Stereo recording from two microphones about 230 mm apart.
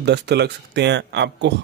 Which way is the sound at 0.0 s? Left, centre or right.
Right.